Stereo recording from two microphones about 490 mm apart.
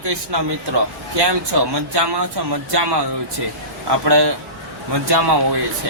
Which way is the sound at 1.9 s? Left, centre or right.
Right.